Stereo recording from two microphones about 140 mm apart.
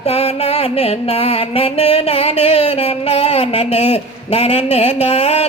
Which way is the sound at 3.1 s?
45° left (ahead or behind).